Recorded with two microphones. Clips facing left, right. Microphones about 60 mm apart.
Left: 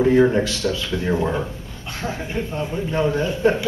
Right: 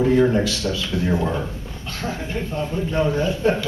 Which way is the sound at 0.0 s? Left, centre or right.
Centre.